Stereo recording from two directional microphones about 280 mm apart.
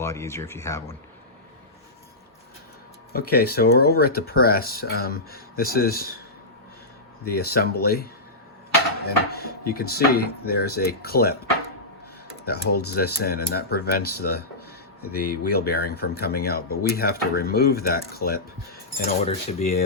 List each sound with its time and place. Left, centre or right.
0.0 s speech: centre
3.1 s speech: left
7.3 s speech: left
9.0 s speech: left
12.5 s speech: left
19.0 s cutlery: left